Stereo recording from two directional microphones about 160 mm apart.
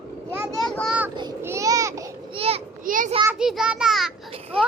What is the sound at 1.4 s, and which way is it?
Speech, 20° right (ahead or behind).